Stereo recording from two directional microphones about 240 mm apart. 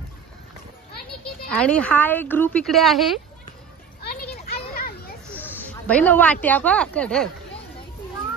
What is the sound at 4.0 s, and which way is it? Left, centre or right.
Children playing, left.